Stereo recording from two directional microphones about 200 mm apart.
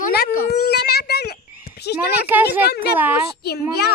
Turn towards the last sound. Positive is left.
turn(degrees=55)  # may be behind; listen again after turning